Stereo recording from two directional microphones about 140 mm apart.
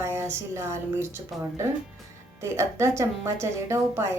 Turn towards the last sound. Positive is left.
turn(degrees=-20)  # may be behind; listen again after turning